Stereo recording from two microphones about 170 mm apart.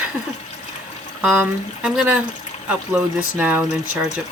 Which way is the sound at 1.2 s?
5° right (ahead or behind).